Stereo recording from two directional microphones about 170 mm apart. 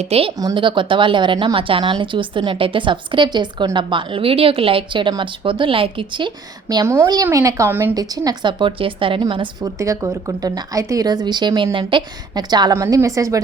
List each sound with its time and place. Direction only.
0.0 s speech: 35° right (ahead or behind)
0.3 s speech: 25° right (ahead or behind)
7.9 s speech: 20° right (ahead or behind)
9.7 s speech: 20° right (ahead or behind)